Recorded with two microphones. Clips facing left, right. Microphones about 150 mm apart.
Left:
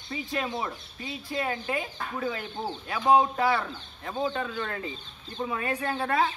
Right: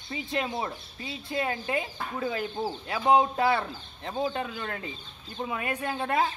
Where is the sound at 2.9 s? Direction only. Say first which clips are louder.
Left 1 dB; 25° right (ahead or behind).